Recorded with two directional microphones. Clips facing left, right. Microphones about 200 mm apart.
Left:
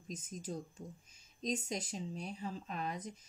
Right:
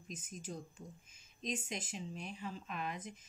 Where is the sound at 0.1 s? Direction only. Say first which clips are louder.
Left 3 dB; 40° left (ahead or behind).